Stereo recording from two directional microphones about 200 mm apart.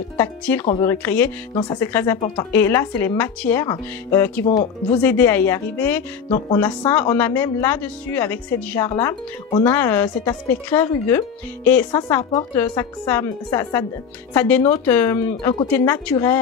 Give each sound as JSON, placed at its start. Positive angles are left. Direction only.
{"t": 0.2, "sound": "speech", "side_deg": 10}
{"t": 1.5, "sound": "speech", "side_deg": 20}
{"t": 1.8, "sound": "speech", "side_deg": 10}
{"t": 2.1, "sound": "speech", "side_deg": 25}
{"t": 2.5, "sound": "speech", "side_deg": 10}
{"t": 7.2, "sound": "speech", "side_deg": 10}
{"t": 9.5, "sound": "speech", "side_deg": 25}
{"t": 9.8, "sound": "speech", "side_deg": 10}
{"t": 12.2, "sound": "speech", "side_deg": 20}